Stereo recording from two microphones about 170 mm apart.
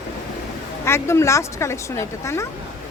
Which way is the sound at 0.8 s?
15° left (ahead or behind).